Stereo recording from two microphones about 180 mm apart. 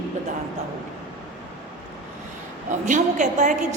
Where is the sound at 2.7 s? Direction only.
45° right (ahead or behind).